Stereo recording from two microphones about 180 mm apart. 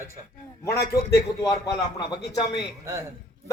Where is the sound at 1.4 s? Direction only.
20° left (ahead or behind).